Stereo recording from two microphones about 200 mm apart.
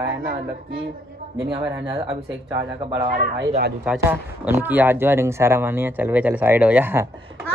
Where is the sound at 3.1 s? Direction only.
50° right (ahead or behind).